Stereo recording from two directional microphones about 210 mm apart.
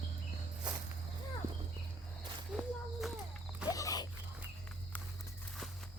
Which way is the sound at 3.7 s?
15° left (ahead or behind).